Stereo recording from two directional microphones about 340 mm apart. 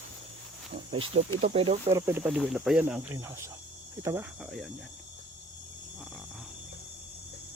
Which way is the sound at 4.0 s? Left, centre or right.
Centre.